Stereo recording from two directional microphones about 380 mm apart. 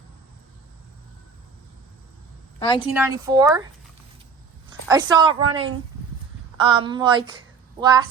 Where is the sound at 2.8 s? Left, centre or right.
Centre.